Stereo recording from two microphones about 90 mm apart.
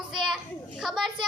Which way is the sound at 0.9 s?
Centre (ahead or behind).